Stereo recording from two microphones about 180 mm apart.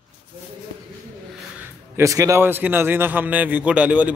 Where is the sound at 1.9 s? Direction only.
15° right (ahead or behind).